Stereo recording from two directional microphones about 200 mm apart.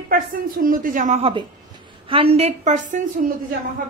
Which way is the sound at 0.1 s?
45° right (ahead or behind).